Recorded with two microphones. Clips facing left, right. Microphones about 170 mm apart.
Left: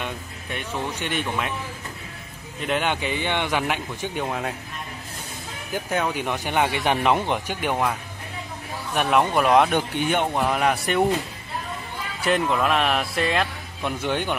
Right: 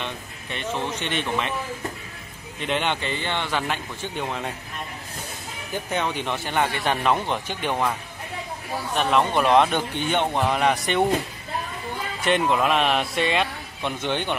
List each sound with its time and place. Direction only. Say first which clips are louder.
0.0 s speech: left 1 dB; 10° left (ahead or behind)
2.6 s speech: left 1 dB; 5° left (ahead or behind)
5.7 s speech: left 1 dB; 5° left (ahead or behind)
8.9 s speech: left 1 dB; 10° left (ahead or behind)
12.3 s speech: right 1 dB; centre (ahead or behind)